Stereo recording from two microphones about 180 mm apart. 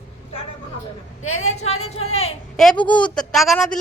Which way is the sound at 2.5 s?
5° left (ahead or behind).